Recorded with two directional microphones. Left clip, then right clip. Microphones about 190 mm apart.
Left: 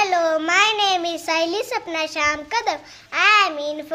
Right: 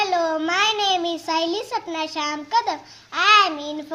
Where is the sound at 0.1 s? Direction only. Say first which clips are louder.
Left 3 dB; 25° left (ahead or behind).